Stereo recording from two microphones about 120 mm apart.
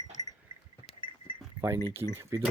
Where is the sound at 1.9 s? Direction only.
20° right (ahead or behind).